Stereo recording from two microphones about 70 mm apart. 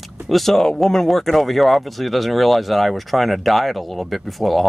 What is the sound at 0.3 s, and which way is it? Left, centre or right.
Speech, centre.